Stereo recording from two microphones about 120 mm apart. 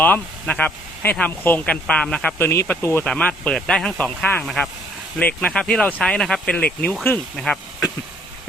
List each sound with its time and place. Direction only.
0.0 s speech: 10° left (ahead or behind)
2.5 s speech: 20° left (ahead or behind); by 7.6 s 5° left (ahead or behind)